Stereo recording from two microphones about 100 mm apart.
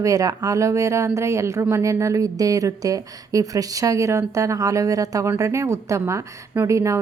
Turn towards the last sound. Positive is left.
turn(degrees=-30)  # may be behind; listen again after turning